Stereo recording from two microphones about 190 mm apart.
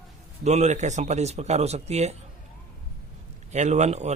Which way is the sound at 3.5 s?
35° right (ahead or behind).